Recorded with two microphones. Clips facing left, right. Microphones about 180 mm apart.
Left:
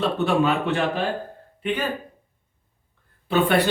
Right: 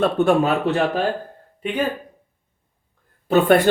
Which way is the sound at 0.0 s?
45° right (ahead or behind).